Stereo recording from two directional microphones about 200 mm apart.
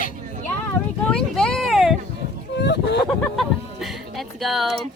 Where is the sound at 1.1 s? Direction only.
5° left (ahead or behind).